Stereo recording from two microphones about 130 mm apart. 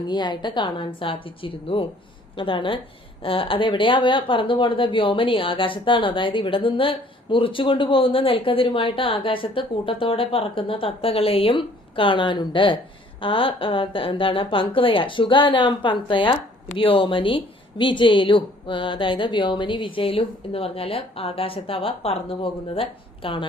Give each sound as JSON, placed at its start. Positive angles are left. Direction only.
{"t": 0.1, "sound": "speech", "side_deg": 35}